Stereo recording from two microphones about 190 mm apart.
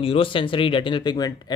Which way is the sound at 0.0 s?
30° left (ahead or behind).